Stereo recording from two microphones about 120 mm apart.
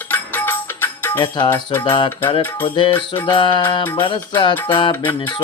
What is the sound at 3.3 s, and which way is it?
Mantra, 40° left (ahead or behind).